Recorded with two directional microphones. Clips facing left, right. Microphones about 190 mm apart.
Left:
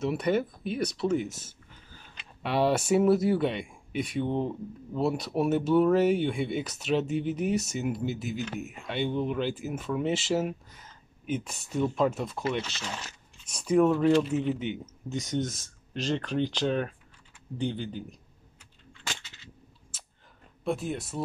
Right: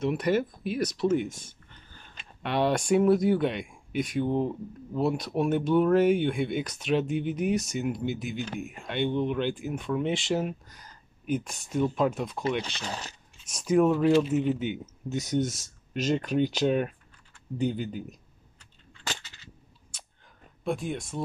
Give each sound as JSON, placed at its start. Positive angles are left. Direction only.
{"t": 0.0, "sound": "speech", "side_deg": 0}
{"t": 12.8, "sound": "speech", "side_deg": -35}
{"t": 13.5, "sound": "speech", "side_deg": 0}
{"t": 19.0, "sound": "cap gun", "side_deg": -40}
{"t": 19.9, "sound": "a sound", "side_deg": 5}
{"t": 20.6, "sound": "speech", "side_deg": 0}